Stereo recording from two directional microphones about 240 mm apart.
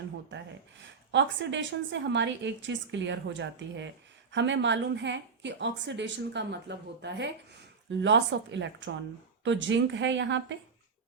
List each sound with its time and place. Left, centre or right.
1.1 s a woman's voice: right